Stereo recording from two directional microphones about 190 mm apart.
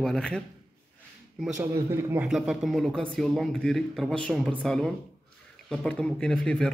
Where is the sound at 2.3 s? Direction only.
Centre (ahead or behind).